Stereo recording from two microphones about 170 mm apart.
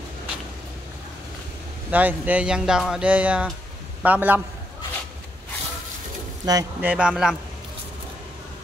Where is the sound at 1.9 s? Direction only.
10° right (ahead or behind).